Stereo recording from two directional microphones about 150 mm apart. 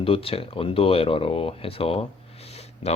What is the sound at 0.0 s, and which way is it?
Speech, 40° left (ahead or behind).